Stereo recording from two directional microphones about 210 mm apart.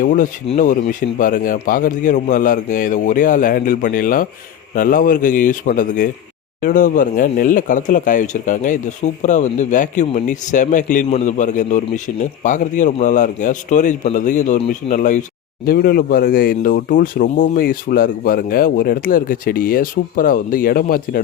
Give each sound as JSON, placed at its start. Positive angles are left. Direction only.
{"t": 0.0, "sound": "speech", "side_deg": 40}